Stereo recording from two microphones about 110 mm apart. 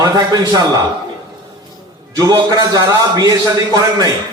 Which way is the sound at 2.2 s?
35° right (ahead or behind).